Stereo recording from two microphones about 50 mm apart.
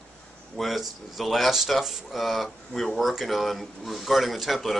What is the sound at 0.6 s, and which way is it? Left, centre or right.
Speech, centre.